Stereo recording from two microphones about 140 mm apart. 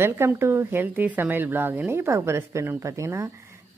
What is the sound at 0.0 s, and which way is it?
Speech, 15° right (ahead or behind).